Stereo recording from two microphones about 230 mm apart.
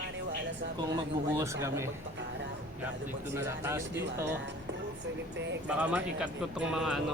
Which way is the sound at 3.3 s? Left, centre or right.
Centre.